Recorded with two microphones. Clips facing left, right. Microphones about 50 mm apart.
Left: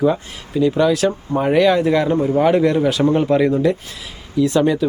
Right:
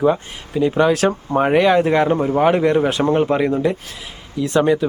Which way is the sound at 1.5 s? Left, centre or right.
Right.